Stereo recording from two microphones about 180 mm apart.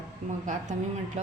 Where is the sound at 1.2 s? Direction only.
40° right (ahead or behind).